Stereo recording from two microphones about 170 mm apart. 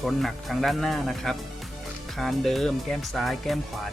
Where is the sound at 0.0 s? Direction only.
Centre (ahead or behind).